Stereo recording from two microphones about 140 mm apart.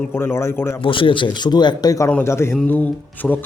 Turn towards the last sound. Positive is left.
turn(degrees=10)  # may be behind; listen again after turning